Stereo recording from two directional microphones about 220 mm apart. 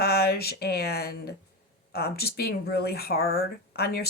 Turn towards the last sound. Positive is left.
turn(degrees=45)  # may be behind; listen again after turning